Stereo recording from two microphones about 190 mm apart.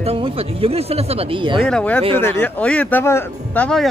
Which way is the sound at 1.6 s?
5° left (ahead or behind).